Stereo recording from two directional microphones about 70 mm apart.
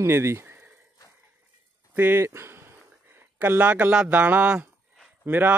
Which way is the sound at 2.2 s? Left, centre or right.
Right.